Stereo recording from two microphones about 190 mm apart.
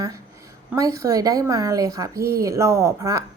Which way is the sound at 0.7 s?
15° right (ahead or behind).